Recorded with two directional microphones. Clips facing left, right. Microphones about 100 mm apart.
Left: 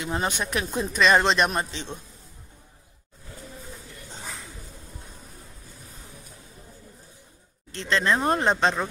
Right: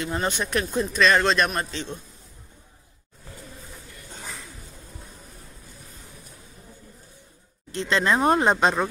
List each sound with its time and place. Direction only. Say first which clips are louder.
0.0 s speech: right 1 dB; 10° left (ahead or behind)
7.7 s speech: right 1 dB; 15° right (ahead or behind)